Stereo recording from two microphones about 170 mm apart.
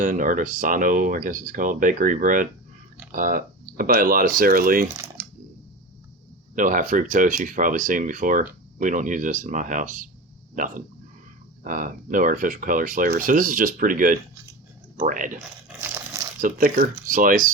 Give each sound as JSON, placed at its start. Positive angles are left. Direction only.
{"t": 0.0, "sound": "speech", "side_deg": -50}
{"t": 6.6, "sound": "speech", "side_deg": -50}
{"t": 15.8, "sound": "crumpling", "side_deg": -15}
{"t": 16.4, "sound": "speech", "side_deg": -55}